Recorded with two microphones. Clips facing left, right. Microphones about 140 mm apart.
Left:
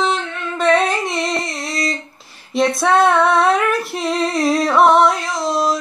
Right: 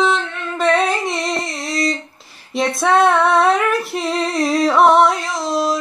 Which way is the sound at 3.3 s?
45° right (ahead or behind).